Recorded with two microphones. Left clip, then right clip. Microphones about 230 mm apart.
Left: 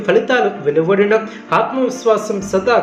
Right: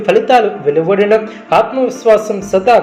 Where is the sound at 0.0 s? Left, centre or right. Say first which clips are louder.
Right 4 dB; centre.